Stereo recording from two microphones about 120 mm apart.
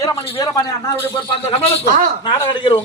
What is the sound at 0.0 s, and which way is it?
Speech, 30° left (ahead or behind).